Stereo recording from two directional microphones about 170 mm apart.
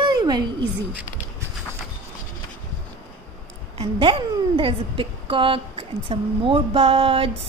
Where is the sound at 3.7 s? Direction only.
30° right (ahead or behind).